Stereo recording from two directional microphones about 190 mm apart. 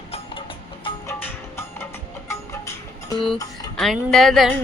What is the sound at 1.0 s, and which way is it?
Music, 15° left (ahead or behind).